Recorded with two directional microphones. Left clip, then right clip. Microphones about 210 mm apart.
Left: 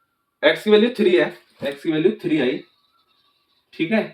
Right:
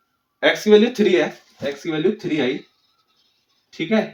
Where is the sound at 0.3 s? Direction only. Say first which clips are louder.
Right 1 dB; 30° right (ahead or behind).